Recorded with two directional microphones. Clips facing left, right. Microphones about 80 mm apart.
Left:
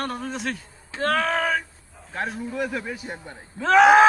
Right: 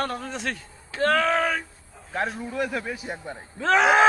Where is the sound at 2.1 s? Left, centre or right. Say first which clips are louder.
Right 1 dB; centre.